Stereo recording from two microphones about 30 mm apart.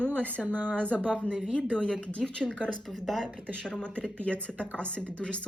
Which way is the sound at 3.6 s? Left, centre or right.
Left.